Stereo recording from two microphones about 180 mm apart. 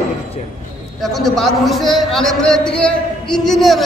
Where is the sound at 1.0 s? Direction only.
Centre (ahead or behind).